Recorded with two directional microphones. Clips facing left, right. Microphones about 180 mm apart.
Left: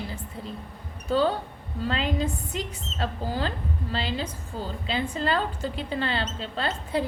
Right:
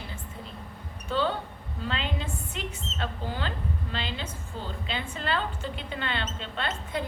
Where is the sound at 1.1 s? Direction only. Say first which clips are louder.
Left 5 dB; 40° left (ahead or behind).